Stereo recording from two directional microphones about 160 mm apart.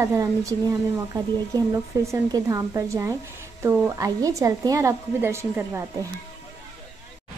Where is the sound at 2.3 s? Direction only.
20° right (ahead or behind).